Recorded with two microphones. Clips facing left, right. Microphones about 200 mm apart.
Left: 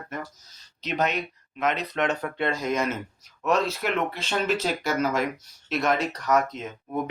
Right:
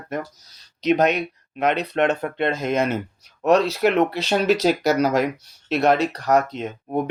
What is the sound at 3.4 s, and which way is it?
Speech, 70° right (ahead or behind).